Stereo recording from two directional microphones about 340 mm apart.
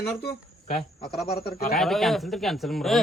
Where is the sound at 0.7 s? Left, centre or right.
Left.